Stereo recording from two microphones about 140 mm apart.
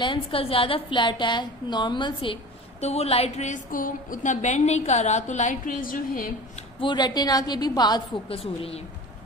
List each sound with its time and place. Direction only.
0.0 s a woman's voice: 40° left (ahead or behind)
2.8 s a woman's voice: 50° left (ahead or behind); by 6.3 s 85° left
6.8 s a woman's voice: 30° left (ahead or behind)
8.3 s a woman's voice: 45° left (ahead or behind)